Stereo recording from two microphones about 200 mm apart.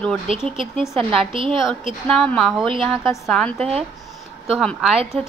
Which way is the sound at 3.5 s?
30° right (ahead or behind).